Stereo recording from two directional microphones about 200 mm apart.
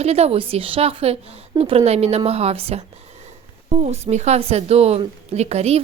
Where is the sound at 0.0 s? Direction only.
30° right (ahead or behind).